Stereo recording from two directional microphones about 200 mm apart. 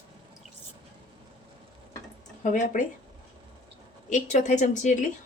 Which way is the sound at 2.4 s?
40° left (ahead or behind).